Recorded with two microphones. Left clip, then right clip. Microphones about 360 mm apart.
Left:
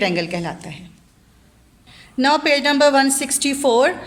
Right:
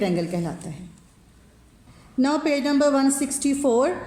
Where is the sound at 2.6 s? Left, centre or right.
Left.